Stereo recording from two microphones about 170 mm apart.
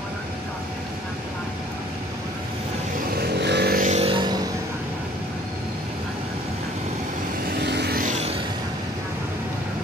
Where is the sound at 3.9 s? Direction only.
35° right (ahead or behind).